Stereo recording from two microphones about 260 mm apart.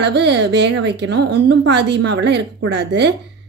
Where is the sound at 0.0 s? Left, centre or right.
Right.